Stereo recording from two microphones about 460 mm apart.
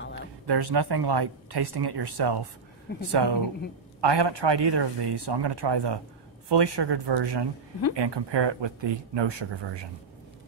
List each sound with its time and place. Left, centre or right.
0.5 s speech: right